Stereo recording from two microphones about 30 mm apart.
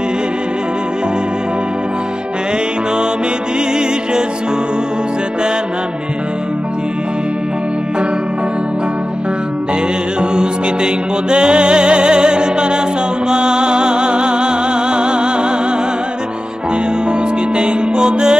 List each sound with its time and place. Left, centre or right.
10.3 s music: right
17.6 s music: right